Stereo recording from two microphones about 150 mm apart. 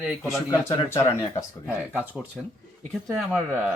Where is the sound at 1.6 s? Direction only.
10° right (ahead or behind).